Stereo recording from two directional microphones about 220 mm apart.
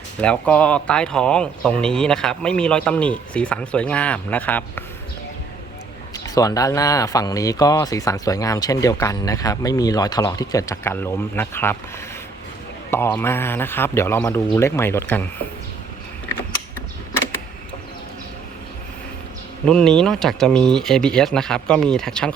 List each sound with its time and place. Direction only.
0.2 s speech: 5° left (ahead or behind)
6.1 s speech: 15° left (ahead or behind)
12.9 s speech: 10° left (ahead or behind)
19.6 s speech: 5° left (ahead or behind)